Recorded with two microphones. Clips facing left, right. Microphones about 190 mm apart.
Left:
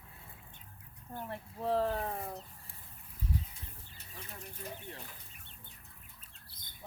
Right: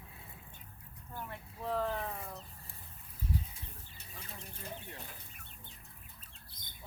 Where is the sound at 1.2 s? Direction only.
35° left (ahead or behind).